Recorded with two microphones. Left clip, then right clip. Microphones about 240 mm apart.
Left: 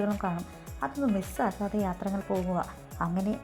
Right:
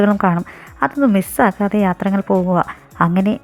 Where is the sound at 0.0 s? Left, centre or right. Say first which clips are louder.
Right 16 dB; right.